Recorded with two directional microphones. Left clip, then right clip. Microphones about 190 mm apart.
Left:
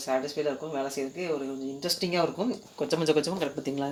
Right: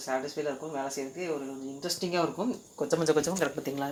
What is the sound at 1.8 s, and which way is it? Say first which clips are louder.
Speech: left 2 dB; 15° left (ahead or behind).